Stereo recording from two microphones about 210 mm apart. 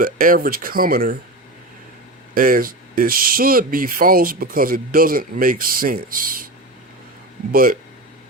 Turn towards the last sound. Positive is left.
turn(degrees=-40)  # may be behind; listen again after turning